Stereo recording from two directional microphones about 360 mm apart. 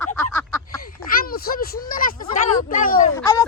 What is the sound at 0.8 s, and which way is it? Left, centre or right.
Speech, left.